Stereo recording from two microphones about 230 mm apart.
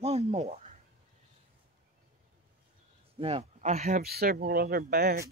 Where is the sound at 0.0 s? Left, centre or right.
Right.